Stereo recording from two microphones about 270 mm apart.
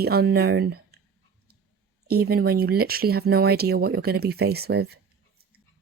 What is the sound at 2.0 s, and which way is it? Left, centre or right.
Speech, right.